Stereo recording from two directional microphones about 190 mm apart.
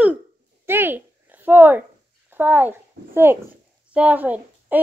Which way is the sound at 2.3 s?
10° right (ahead or behind).